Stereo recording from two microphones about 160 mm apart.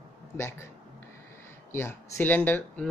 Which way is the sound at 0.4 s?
15° left (ahead or behind).